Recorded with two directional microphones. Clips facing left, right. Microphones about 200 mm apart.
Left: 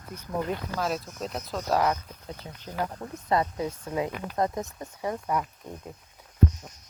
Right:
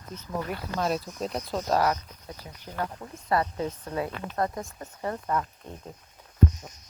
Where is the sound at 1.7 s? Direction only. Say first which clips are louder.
Left 1 dB; 20° left (ahead or behind).